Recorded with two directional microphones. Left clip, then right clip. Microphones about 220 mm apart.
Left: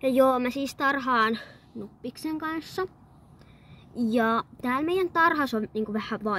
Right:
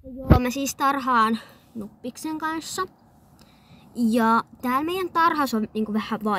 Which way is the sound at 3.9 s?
Centre (ahead or behind).